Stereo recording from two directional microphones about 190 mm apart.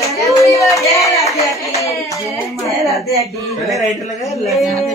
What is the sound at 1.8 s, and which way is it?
Clapping, 15° left (ahead or behind).